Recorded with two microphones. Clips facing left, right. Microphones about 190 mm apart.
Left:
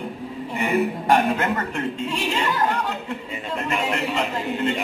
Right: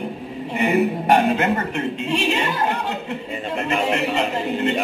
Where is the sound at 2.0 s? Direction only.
70° right (ahead or behind).